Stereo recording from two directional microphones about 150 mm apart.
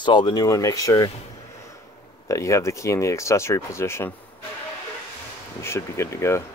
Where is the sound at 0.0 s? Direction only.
30° left (ahead or behind).